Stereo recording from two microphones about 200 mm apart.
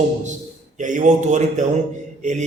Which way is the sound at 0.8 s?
40° right (ahead or behind).